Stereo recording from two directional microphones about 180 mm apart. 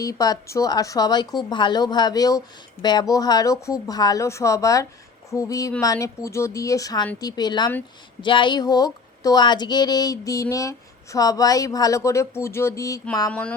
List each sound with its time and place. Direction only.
0.0 s speech: 20° left (ahead or behind)